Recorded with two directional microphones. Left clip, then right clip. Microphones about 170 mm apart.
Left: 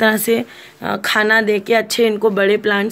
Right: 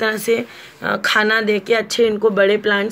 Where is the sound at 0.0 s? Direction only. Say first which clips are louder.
Left 3 dB; 65° left (ahead or behind).